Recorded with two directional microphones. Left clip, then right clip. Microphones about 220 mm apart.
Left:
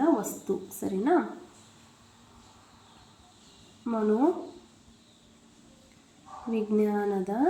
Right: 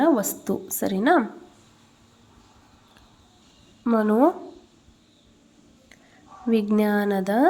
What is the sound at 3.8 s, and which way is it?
Speech, 50° right (ahead or behind).